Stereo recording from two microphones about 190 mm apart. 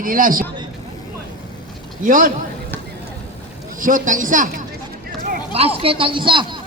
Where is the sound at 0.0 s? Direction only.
45° right (ahead or behind).